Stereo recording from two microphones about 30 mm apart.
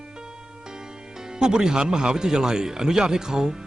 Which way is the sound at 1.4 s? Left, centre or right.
Right.